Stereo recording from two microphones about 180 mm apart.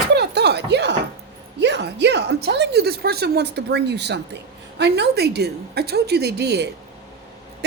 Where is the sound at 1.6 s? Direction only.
70° right (ahead or behind).